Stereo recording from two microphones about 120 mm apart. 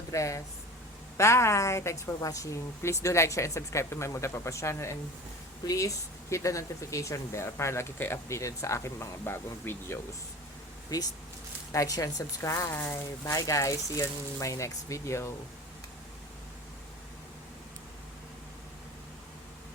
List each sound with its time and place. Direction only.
0.1 s a woman's voice: 25° left (ahead or behind)
10.8 s a woman's voice: 30° left (ahead or behind)